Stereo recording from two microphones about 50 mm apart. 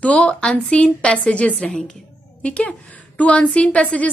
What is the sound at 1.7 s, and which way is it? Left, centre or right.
A woman's voice, centre.